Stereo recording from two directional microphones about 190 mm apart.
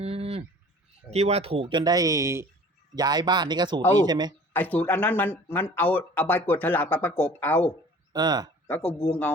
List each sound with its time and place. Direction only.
0.0 s bird: 30° right (ahead or behind)
1.1 s speech: 35° right (ahead or behind)
4.5 s speech: 10° left (ahead or behind)
8.1 s speech: 20° right (ahead or behind)
8.6 s speech: 10° left (ahead or behind)